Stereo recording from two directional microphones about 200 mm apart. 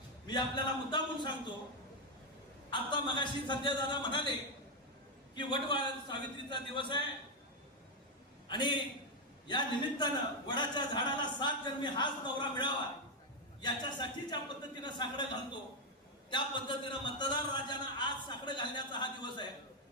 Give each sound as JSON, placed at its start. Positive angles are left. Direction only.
{"t": 0.3, "sound": "a man's voice", "side_deg": 25}
{"t": 2.6, "sound": "a man's voice", "side_deg": 25}
{"t": 5.3, "sound": "a man's voice", "side_deg": 25}
{"t": 8.4, "sound": "a man's voice", "side_deg": 25}
{"t": 16.3, "sound": "a man's voice", "side_deg": 25}